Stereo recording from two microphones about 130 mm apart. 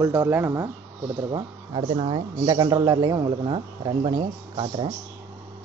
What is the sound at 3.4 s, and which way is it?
Cricket, 40° right (ahead or behind).